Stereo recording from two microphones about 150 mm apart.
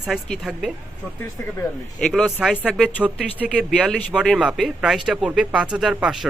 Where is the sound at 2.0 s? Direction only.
Centre (ahead or behind).